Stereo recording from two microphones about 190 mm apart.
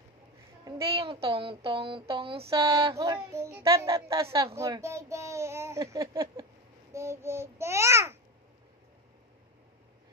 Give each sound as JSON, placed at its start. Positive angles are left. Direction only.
{"t": 0.7, "sound": "speech", "side_deg": -25}
{"t": 2.9, "sound": "speech", "side_deg": -15}
{"t": 6.9, "sound": "babbling", "side_deg": -15}